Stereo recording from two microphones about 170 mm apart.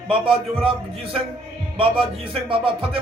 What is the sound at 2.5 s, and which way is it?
Speech, 30° right (ahead or behind).